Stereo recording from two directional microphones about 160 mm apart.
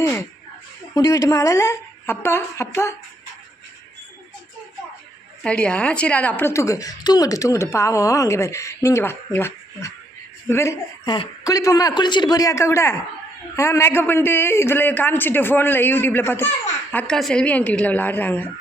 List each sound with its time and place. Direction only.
0.0 s a sound: 15° left (ahead or behind)
0.9 s a man's voice: 20° left (ahead or behind)
5.4 s a woman's voice: 5° left (ahead or behind)
11.0 s a man's voice: 30° left (ahead or behind); by 18.4 s 10° left (ahead or behind)